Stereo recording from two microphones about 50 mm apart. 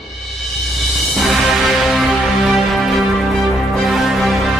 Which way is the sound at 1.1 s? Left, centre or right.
Centre.